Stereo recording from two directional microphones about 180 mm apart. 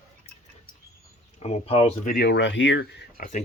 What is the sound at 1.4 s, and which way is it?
Speech, 35° left (ahead or behind).